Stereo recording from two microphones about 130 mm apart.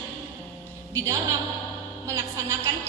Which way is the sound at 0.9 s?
25° right (ahead or behind).